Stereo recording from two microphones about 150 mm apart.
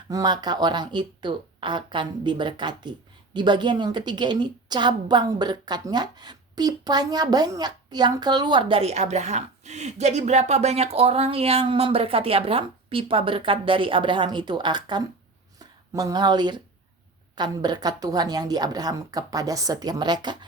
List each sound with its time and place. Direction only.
0.1 s a woman's voice: 25° right (ahead or behind)